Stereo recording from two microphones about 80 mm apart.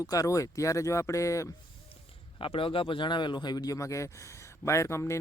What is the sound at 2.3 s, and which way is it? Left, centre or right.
A man's voice, left.